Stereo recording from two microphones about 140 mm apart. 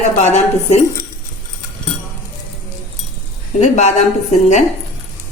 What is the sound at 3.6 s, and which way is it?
Speech, 55° left (ahead or behind).